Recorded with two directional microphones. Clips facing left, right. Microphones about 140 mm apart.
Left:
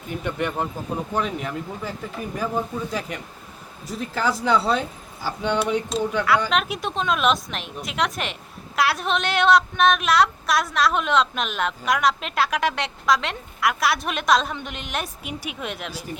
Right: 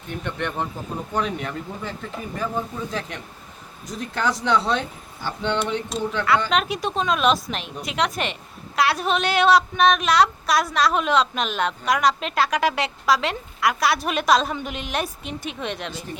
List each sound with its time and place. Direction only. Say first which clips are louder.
0.1 s a woman's voice: left 2 dB; 5° left (ahead or behind)